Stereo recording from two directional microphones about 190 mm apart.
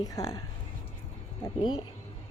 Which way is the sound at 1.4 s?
25° left (ahead or behind).